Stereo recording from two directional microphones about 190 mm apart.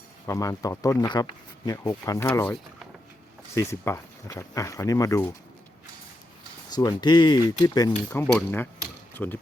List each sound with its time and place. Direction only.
0.3 s speech: 15° left (ahead or behind)
6.7 s speech: 20° left (ahead or behind)
8.2 s speech: centre (ahead or behind)